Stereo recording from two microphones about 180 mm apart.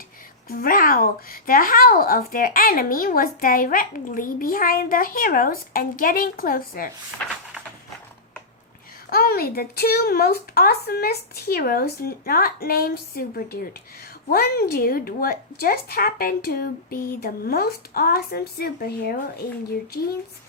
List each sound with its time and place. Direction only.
0.4 s speech: 55° left (ahead or behind)
9.0 s a woman's voice: 55° left (ahead or behind)